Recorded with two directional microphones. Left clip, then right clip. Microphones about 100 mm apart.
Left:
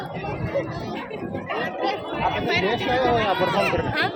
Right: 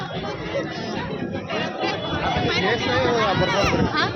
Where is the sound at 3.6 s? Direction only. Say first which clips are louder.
Right 1 dB; 25° right (ahead or behind).